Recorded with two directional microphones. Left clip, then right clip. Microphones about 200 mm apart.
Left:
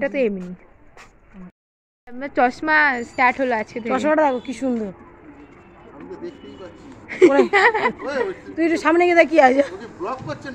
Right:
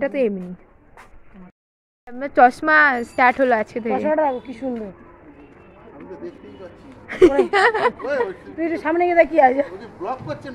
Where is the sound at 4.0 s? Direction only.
55° left (ahead or behind).